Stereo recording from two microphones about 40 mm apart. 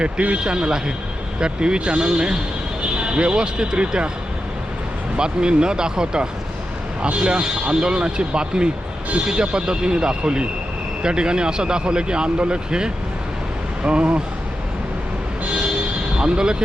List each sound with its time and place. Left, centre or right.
0.0 s speech: right
5.1 s speech: right
16.1 s speech: right